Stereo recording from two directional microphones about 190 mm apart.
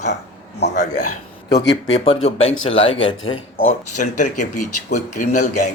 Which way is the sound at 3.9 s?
40° left (ahead or behind).